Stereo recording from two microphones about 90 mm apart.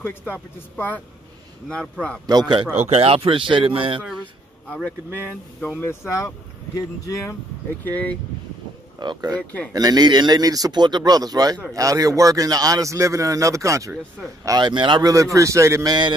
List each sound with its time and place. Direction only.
0.6 s speech: 20° left (ahead or behind)
1.8 s speech: 10° left (ahead or behind)
2.2 s speech: 50° right (ahead or behind)
2.9 s speech: 90° right
5.7 s speech: 25° left (ahead or behind)
7.8 s speech: 15° left (ahead or behind)
9.0 s a man's voice: 50° right (ahead or behind); by 13.9 s 35° right (ahead or behind)
14.6 s speech: 60° right (ahead or behind)
15.3 s a man's voice: 35° right (ahead or behind)
15.9 s speech: 55° right (ahead or behind)